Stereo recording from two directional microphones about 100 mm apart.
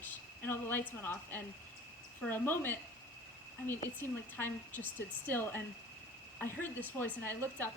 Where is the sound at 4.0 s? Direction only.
20° left (ahead or behind).